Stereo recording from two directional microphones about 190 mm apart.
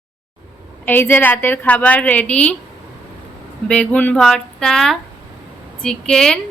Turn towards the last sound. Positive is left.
turn(degrees=5)  # may be behind; listen again after turning